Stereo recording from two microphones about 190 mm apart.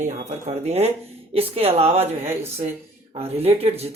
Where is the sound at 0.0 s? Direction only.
40° right (ahead or behind).